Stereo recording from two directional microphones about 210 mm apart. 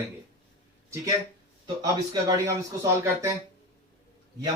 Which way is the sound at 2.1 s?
15° right (ahead or behind).